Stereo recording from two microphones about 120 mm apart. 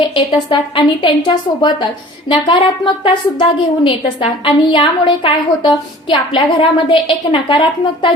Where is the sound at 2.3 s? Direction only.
45° left (ahead or behind).